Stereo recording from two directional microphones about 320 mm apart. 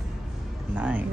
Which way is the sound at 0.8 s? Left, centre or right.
Centre.